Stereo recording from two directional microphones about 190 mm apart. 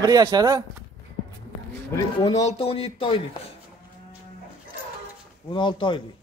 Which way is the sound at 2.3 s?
35° left (ahead or behind).